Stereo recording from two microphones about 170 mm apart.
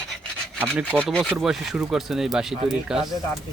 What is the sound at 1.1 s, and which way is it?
Speech, centre (ahead or behind).